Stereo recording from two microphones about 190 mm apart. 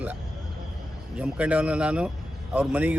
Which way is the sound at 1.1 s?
5° right (ahead or behind).